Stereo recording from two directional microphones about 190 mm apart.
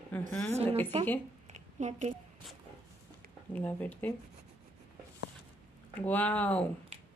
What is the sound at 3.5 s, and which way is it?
Speech, 10° left (ahead or behind).